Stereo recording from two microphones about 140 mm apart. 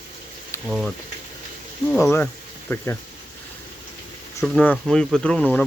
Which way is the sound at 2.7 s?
15° left (ahead or behind).